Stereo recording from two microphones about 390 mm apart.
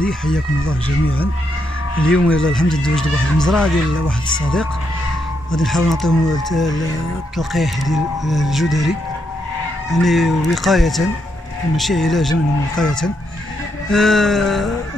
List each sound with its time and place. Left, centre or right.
0.0 s speech: centre
0.8 s speech: left
2.1 s speech: centre
5.5 s speech: centre
9.9 s speech: centre